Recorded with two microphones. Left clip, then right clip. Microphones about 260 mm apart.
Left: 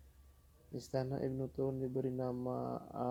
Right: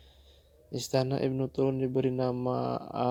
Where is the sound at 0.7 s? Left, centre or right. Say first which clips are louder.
Right 10 dB; right.